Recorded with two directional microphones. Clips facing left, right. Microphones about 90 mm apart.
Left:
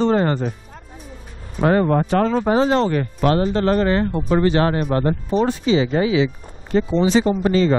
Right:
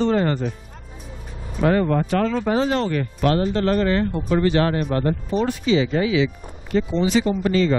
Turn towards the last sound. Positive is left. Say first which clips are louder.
# left 2 dB
turn(degrees=30)  # may be behind; listen again after turning